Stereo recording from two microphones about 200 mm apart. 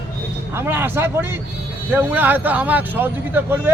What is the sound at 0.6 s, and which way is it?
Speech, 10° right (ahead or behind).